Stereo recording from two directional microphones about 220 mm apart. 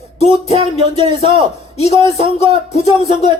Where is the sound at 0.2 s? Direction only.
30° left (ahead or behind).